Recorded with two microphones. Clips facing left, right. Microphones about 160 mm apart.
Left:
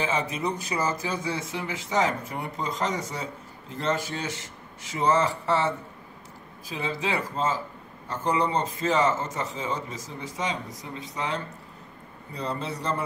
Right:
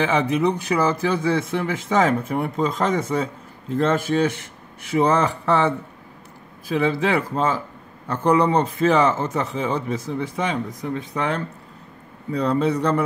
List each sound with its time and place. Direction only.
0.0 s a man's voice: 65° right (ahead or behind)
6.7 s a man's voice: 60° right (ahead or behind)
12.3 s a man's voice: 70° right (ahead or behind)